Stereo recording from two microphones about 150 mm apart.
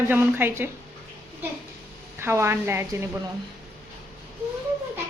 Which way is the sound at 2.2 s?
15° right (ahead or behind).